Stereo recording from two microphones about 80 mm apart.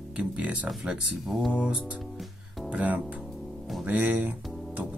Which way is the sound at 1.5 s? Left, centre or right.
Centre.